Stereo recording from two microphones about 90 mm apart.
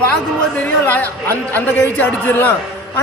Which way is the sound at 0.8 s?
20° left (ahead or behind).